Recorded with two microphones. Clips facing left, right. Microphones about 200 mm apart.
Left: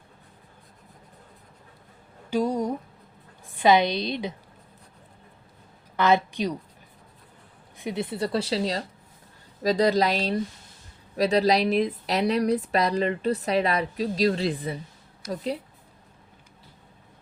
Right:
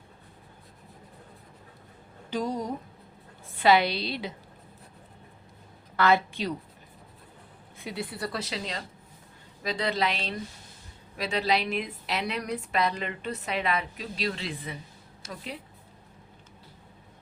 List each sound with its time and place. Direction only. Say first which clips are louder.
2.3 s a sound: left 5 dB; 10° left (ahead or behind)
3.5 s speech: left 2 dB; 20° left (ahead or behind)
6.0 s a woman's voice: left 2 dB; 20° left (ahead or behind)
7.8 s a woman's voice: left 6 dB; 20° left (ahead or behind); by 14.8 s 35° left (ahead or behind)